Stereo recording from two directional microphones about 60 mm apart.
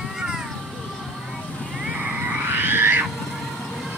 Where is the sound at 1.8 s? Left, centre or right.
Right.